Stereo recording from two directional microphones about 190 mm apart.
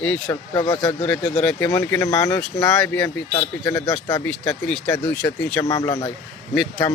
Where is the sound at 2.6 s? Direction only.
5° left (ahead or behind).